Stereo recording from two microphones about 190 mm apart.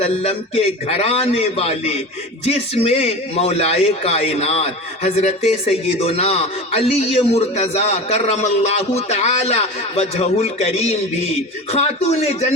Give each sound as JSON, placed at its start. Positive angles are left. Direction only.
{"t": 0.0, "sound": "a man's voice", "side_deg": 35}